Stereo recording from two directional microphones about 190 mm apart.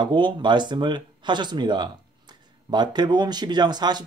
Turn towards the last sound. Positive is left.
turn(degrees=-20)  # may be behind; listen again after turning